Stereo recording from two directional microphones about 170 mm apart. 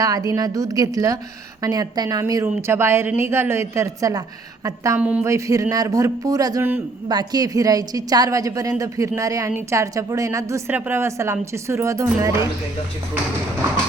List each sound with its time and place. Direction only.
0.0 s a woman's voice: 20° right (ahead or behind)
4.9 s a woman's voice: 10° right (ahead or behind)
5.3 s a woman's voice: 20° right (ahead or behind)